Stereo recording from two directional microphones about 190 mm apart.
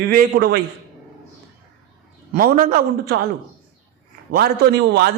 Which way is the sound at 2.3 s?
50° right (ahead or behind).